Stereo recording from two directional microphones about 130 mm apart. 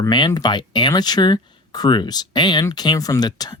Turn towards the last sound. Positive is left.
turn(degrees=30)  # may be behind; listen again after turning